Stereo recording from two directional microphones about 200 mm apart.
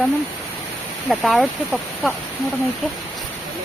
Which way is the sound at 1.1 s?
Centre (ahead or behind).